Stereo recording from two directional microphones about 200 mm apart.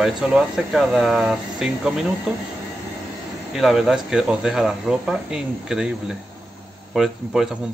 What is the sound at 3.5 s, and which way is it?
Speech, centre (ahead or behind).